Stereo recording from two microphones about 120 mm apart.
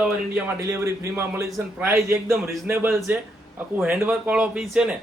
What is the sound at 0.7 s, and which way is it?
A man's voice, 20° right (ahead or behind).